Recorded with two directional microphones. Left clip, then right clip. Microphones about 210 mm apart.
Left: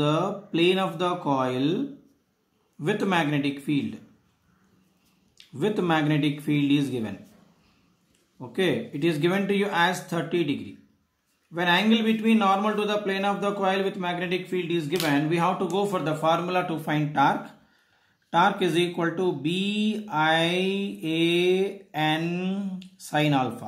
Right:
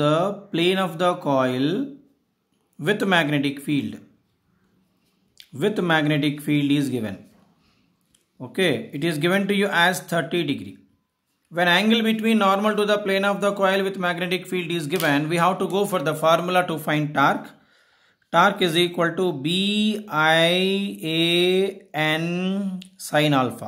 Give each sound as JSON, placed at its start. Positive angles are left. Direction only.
{"t": 0.0, "sound": "speech", "side_deg": -40}
{"t": 2.8, "sound": "speech", "side_deg": -40}
{"t": 5.4, "sound": "speech", "side_deg": -40}
{"t": 8.4, "sound": "speech", "side_deg": -40}